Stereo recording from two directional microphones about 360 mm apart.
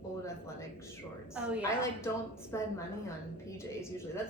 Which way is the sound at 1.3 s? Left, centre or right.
Centre.